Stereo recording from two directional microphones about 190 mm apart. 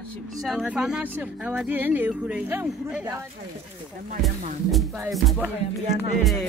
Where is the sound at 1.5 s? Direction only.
10° right (ahead or behind).